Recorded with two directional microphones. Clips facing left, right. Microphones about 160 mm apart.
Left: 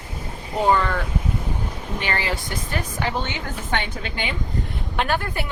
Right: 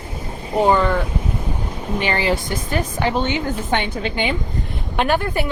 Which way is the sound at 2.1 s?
20° right (ahead or behind).